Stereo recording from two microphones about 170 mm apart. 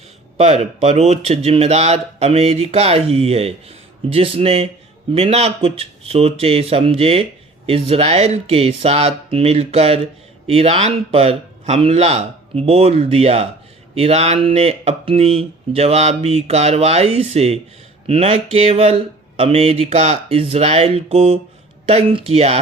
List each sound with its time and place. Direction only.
0.3 s speech: 35° right (ahead or behind)